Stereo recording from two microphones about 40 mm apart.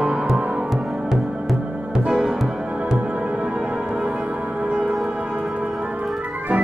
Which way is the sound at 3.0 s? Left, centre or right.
Right.